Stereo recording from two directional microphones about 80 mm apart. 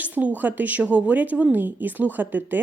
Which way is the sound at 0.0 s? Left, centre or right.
Centre.